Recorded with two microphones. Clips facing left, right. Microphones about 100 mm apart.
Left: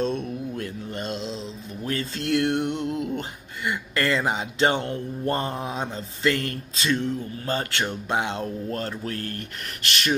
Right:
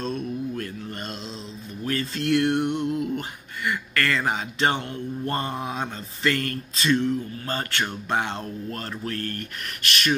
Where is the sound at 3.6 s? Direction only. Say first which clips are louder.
Even; 20° left (ahead or behind).